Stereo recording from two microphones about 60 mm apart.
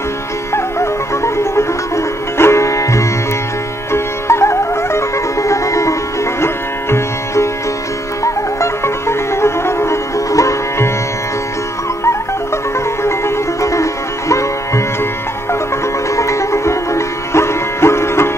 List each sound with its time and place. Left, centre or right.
0.5 s music: left
6.4 s music: left
13.0 s music: left
16.2 s music: left